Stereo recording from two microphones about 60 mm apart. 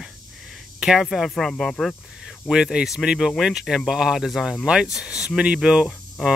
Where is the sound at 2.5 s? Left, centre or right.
Centre.